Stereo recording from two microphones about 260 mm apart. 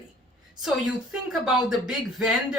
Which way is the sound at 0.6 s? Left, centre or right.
Centre.